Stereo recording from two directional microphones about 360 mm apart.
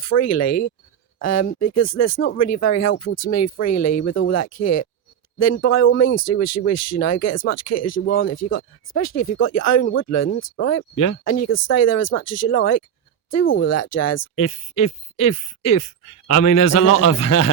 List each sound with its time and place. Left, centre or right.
0.1 s speech: left
1.5 s speech: left
1.7 s speech: left
8.0 s speech: left
9.0 s speech: left
14.8 s speech: left